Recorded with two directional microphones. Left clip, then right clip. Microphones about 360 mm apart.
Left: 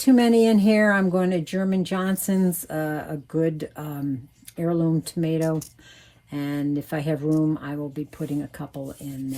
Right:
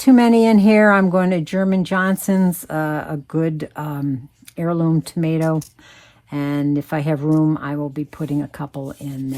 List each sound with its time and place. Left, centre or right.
0.0 s speech: right